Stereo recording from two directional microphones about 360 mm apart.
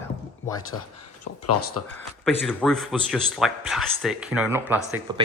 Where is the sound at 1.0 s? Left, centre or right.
Left.